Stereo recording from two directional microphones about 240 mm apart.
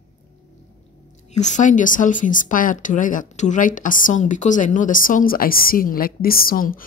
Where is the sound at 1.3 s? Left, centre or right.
Left.